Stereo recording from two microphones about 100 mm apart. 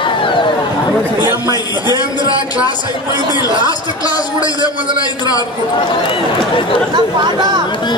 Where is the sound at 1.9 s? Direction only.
40° left (ahead or behind).